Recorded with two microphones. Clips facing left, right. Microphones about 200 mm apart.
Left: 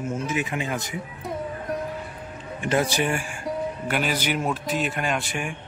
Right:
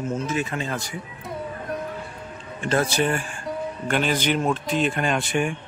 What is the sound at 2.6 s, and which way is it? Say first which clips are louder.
A man's voice: right 1 dB; 15° left (ahead or behind).